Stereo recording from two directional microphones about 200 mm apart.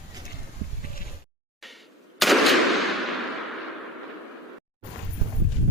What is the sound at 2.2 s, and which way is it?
Gunshot, centre (ahead or behind).